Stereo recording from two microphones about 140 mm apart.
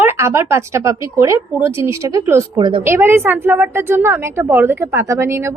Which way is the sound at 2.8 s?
20° right (ahead or behind).